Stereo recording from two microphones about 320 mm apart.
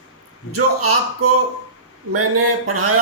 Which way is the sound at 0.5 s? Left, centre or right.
Right.